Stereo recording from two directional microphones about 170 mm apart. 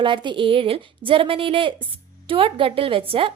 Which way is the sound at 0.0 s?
30° right (ahead or behind).